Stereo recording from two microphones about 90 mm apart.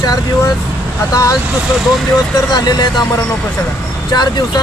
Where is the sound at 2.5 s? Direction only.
50° left (ahead or behind).